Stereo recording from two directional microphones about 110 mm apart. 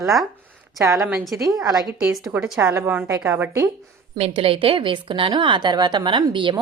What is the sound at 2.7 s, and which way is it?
Speech, 25° right (ahead or behind).